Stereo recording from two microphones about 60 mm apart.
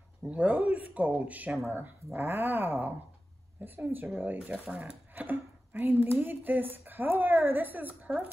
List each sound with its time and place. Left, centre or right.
0.3 s speech: right
4.4 s speech: centre
5.1 s speech: right